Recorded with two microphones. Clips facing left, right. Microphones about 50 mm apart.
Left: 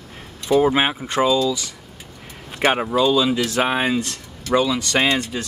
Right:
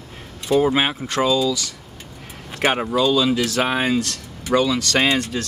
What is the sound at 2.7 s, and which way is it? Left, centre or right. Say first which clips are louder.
Speech: left 1 dB; centre.